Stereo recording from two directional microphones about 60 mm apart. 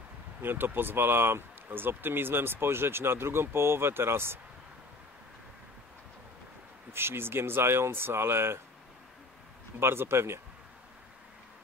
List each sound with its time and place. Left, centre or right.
0.4 s speech: right
6.9 s speech: right
9.8 s speech: right